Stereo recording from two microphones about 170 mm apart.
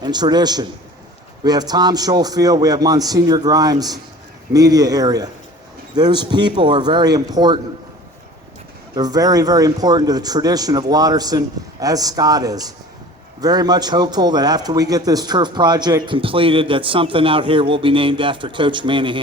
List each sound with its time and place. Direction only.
0.0 s a man's voice: 25° right (ahead or behind)
9.0 s a man's voice: 20° right (ahead or behind)